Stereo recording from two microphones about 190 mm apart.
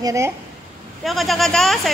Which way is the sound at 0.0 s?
15° right (ahead or behind).